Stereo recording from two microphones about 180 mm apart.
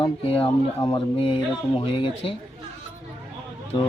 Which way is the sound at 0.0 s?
30° left (ahead or behind).